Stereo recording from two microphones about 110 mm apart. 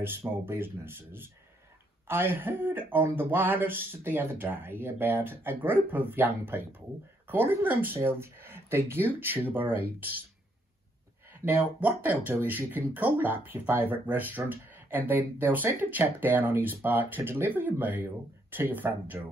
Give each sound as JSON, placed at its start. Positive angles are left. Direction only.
{"t": 0.5, "sound": "speech", "side_deg": -20}
{"t": 11.4, "sound": "speech", "side_deg": -15}